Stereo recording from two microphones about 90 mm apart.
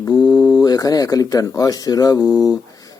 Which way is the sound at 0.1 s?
45° left (ahead or behind).